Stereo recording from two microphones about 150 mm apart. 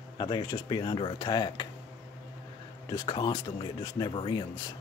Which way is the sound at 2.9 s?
30° left (ahead or behind).